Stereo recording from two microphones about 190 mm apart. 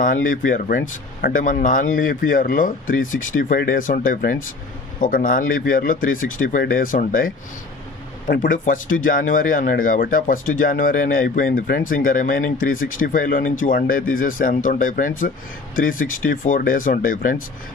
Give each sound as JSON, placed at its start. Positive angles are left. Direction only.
{"t": 0.0, "sound": "speech", "side_deg": 45}